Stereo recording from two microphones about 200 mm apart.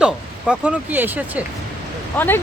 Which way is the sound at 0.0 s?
5° right (ahead or behind).